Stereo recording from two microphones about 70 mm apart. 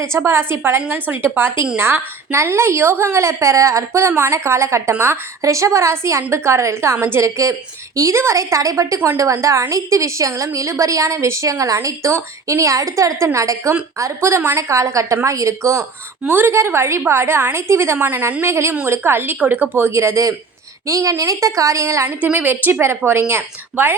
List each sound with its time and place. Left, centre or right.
0.0 s a woman's voice: right
7.3 s a woman's voice: right
16.3 s a woman's voice: right
19.7 s a woman's voice: right
22.2 s a woman's voice: right